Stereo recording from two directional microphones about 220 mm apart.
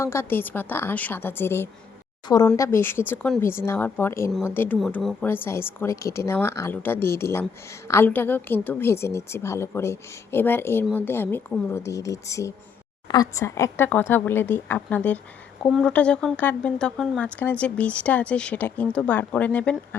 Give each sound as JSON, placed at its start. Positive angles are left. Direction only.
{"t": 0.0, "sound": "speech", "side_deg": 10}
{"t": 4.3, "sound": "speech", "side_deg": 0}